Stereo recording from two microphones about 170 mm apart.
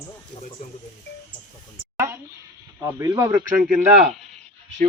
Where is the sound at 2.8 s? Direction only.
15° right (ahead or behind).